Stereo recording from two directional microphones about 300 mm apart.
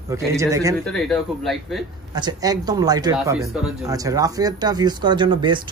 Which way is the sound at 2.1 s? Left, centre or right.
Centre.